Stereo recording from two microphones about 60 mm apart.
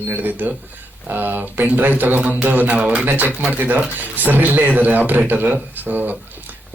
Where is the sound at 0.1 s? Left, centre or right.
Right.